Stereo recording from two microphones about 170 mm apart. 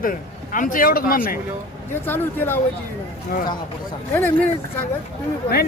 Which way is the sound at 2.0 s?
10° left (ahead or behind).